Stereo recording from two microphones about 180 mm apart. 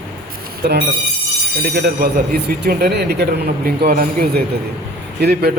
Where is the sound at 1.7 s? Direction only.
60° right (ahead or behind).